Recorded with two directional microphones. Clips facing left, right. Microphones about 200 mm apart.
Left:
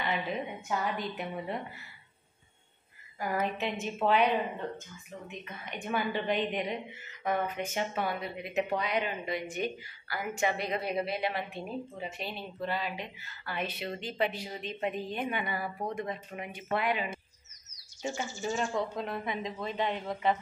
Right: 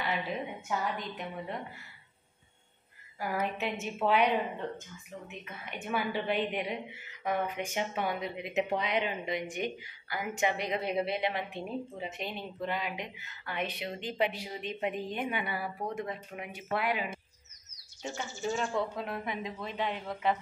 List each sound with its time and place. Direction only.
0.0 s speech: centre (ahead or behind)
3.2 s a woman's voice: 5° right (ahead or behind)
5.3 s a woman's voice: 5° right (ahead or behind)
18.0 s speech: 5° left (ahead or behind)